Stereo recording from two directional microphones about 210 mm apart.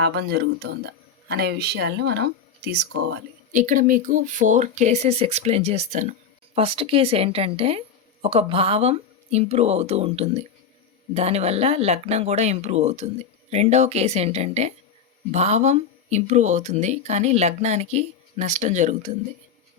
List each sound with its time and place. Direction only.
0.0 s speech: 50° right (ahead or behind)
3.5 s speech: 35° right (ahead or behind)